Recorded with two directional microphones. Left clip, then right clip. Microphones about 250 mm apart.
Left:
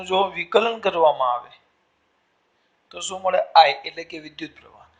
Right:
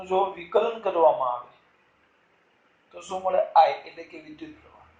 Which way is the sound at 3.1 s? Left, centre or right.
Left.